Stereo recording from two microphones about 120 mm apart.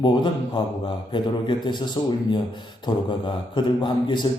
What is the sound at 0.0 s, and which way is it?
A man's voice, 40° left (ahead or behind).